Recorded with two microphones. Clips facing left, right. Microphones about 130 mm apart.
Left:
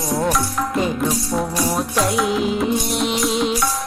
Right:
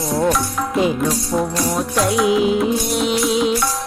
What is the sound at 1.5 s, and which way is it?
Music, 5° left (ahead or behind).